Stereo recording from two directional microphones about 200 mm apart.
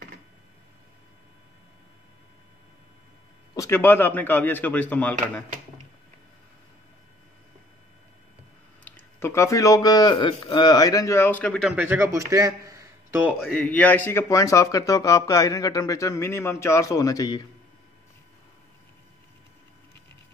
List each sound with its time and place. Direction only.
3.5 s speech: 15° left (ahead or behind)
8.8 s speech: 10° left (ahead or behind)
11.7 s a man's voice: 10° right (ahead or behind)
13.4 s speech: 5° left (ahead or behind)